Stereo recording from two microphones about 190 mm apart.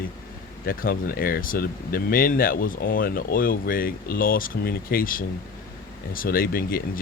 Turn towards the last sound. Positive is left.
turn(degrees=50)  # may be behind; listen again after turning